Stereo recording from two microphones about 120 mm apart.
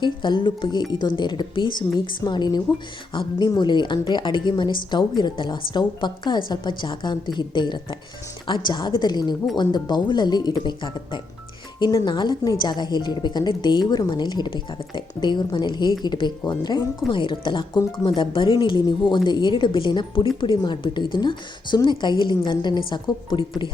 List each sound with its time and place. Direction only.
0.0 s a woman's voice: 40° left (ahead or behind)